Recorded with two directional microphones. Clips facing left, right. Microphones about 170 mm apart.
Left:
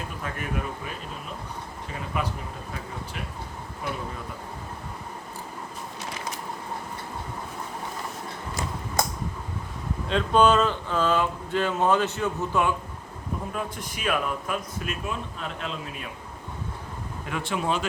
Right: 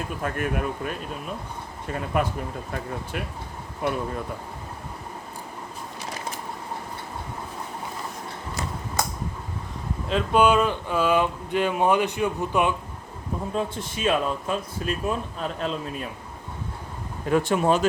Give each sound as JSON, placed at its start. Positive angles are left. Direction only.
{"t": 0.2, "sound": "speech", "side_deg": -55}
{"t": 2.1, "sound": "speech", "side_deg": -50}
{"t": 10.1, "sound": "speech", "side_deg": -5}
{"t": 13.5, "sound": "a man's voice", "side_deg": -25}
{"t": 17.2, "sound": "speech", "side_deg": -40}